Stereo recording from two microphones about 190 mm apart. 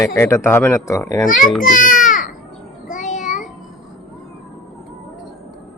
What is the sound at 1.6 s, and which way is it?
Baby cry, 45° left (ahead or behind).